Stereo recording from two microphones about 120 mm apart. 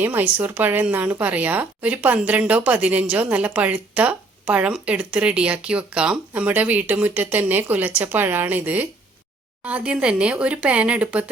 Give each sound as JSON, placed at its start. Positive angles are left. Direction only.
{"t": 0.0, "sound": "speech", "side_deg": -15}